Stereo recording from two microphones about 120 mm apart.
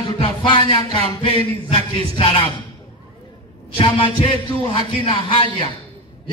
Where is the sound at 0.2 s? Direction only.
40° left (ahead or behind).